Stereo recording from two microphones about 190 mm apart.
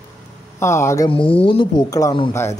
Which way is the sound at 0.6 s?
15° left (ahead or behind).